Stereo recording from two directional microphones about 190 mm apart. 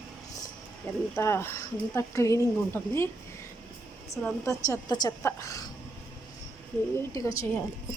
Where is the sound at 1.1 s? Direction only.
15° left (ahead or behind).